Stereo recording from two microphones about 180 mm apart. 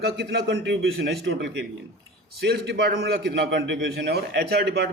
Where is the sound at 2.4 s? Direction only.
65° right (ahead or behind).